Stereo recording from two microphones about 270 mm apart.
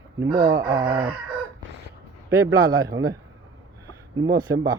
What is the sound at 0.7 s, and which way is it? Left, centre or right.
Speech, centre.